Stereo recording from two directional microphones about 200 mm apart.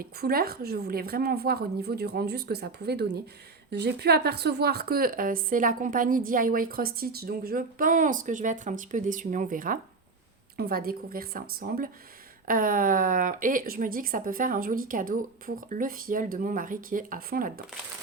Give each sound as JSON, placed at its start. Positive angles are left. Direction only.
{"t": 0.0, "sound": "speech", "side_deg": -50}